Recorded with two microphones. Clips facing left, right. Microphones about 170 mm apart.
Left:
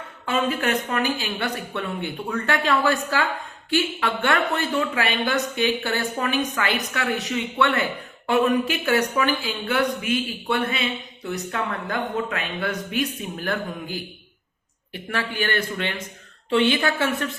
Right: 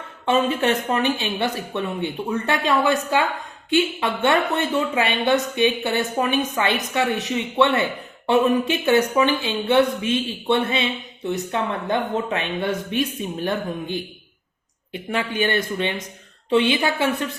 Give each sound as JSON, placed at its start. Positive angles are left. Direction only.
{"t": 0.3, "sound": "speech", "side_deg": -25}